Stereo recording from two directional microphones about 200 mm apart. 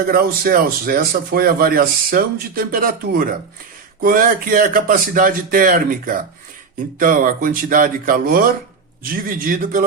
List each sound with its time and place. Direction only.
0.0 s a man's voice: 45° right (ahead or behind)